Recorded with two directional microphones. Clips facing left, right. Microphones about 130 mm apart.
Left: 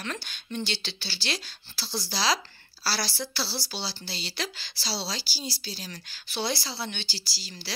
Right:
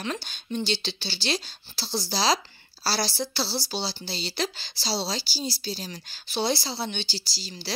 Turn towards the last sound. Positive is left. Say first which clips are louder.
# right 4 dB
turn(degrees=-20)  # may be behind; listen again after turning